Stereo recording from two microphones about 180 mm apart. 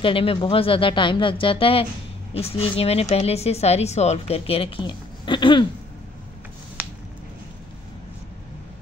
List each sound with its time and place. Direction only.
0.0 s speech: 30° left (ahead or behind)